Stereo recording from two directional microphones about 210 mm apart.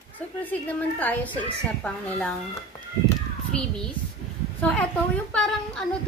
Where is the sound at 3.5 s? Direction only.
5° left (ahead or behind).